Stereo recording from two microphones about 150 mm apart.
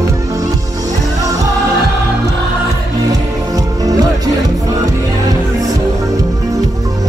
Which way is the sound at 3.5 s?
25° right (ahead or behind).